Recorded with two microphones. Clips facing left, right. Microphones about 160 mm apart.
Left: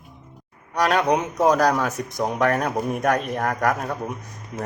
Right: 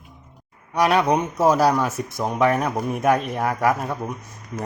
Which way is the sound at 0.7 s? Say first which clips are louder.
Right 1 dB; 10° right (ahead or behind).